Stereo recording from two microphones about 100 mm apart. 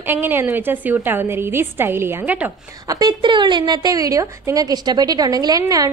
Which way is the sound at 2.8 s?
50° right (ahead or behind).